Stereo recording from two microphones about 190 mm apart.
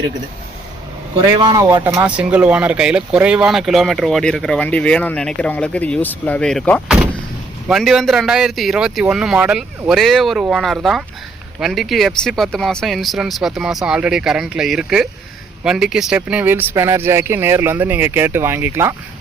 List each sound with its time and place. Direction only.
1.3 s a man's voice: 25° right (ahead or behind)
1.8 s speech: 10° right (ahead or behind)